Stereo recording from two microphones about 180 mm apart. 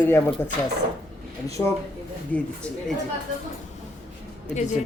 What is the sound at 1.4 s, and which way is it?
Speech, 20° left (ahead or behind).